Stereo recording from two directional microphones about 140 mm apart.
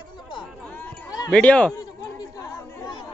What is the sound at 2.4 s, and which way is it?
Chatter, 20° left (ahead or behind).